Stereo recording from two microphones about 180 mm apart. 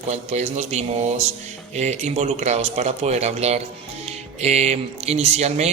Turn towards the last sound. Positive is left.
turn(degrees=-35)  # may be behind; listen again after turning